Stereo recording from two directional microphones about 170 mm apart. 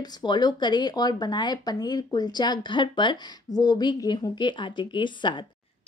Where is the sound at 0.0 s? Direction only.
25° left (ahead or behind).